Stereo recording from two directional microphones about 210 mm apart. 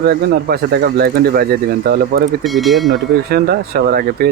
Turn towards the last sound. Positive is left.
turn(degrees=-45)  # may be behind; listen again after turning